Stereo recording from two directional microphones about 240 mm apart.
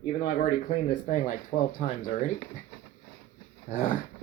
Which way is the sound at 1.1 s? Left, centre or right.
Left.